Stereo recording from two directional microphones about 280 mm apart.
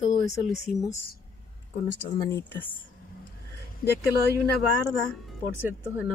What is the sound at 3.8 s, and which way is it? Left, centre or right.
Speech, left.